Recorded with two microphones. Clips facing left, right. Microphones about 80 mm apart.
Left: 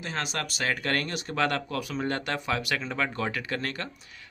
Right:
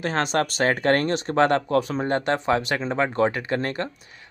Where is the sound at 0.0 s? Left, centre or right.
Right.